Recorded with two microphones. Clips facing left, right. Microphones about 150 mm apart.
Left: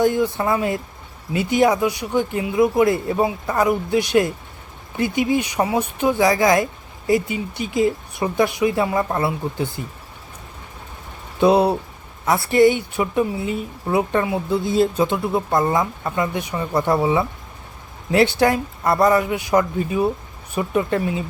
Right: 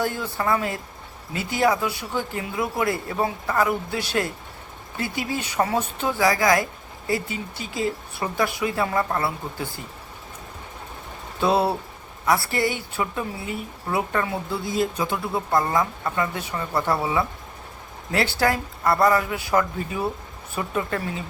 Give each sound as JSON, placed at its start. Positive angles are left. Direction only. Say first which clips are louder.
{"t": 0.0, "sound": "a woman's voice", "louder": "left 7 dB", "side_deg": 20}
{"t": 11.3, "sound": "a woman's voice", "louder": "left 6 dB", "side_deg": 20}